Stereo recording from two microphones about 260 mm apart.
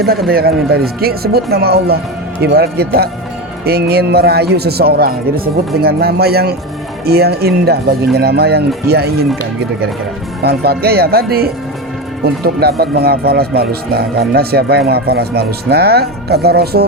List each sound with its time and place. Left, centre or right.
0.3 s speech: right
10.4 s speech: right